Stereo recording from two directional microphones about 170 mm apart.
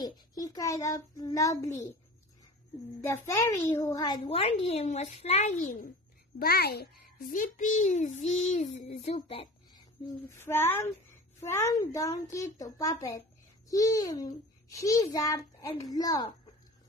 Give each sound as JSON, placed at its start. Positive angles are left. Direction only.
{"t": 0.0, "sound": "a child's voice", "side_deg": 20}
{"t": 3.0, "sound": "a child's voice", "side_deg": 15}
{"t": 6.4, "sound": "a child's voice", "side_deg": 65}
{"t": 10.3, "sound": "a child's voice", "side_deg": 15}